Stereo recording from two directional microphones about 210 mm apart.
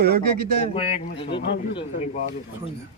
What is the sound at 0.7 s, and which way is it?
Speech, 25° left (ahead or behind).